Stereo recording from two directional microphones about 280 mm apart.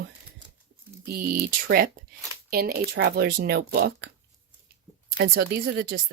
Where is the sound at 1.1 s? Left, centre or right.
Right.